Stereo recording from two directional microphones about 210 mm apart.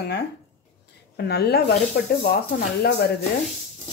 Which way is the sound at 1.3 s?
50° left (ahead or behind).